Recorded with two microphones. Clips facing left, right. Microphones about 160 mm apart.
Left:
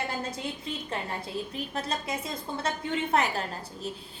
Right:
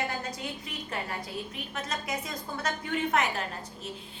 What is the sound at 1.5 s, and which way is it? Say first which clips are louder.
A woman's voice: left 3 dB; 35° left (ahead or behind).